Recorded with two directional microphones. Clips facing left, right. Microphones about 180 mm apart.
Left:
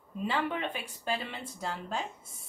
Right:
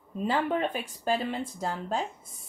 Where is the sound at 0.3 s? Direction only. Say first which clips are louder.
Right 5 dB; 45° right (ahead or behind).